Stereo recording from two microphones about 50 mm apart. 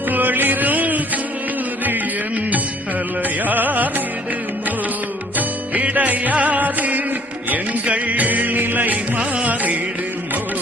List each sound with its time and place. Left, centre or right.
0.1 s music: right
5.7 s music: right
9.1 s music: right